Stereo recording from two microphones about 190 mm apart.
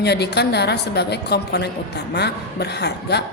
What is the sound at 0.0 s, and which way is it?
A woman's voice, 60° left (ahead or behind).